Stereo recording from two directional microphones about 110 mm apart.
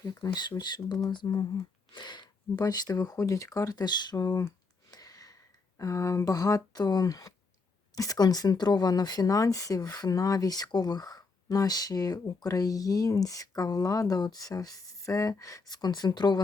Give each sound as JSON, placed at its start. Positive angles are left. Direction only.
{"t": 0.0, "sound": "speech", "side_deg": 35}